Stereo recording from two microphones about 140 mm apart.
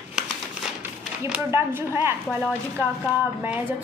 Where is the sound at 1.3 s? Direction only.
15° right (ahead or behind).